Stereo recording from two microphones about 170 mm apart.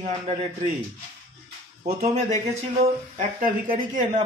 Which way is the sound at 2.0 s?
40° right (ahead or behind).